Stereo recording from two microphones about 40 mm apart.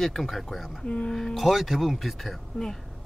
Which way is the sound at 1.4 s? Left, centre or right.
Centre.